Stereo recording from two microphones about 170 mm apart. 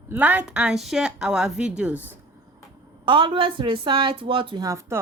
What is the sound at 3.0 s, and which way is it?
A woman's voice, 30° right (ahead or behind).